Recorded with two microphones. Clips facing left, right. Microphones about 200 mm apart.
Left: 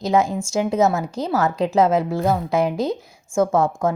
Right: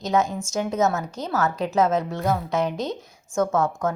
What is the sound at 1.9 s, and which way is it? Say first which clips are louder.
Speech: left 4 dB; 10° left (ahead or behind).